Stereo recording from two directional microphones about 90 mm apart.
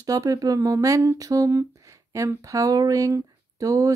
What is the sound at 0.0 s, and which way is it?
Speech, 40° right (ahead or behind).